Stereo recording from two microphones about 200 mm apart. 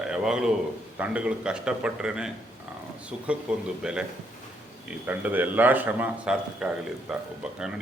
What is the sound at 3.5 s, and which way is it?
A man's voice, 5° right (ahead or behind).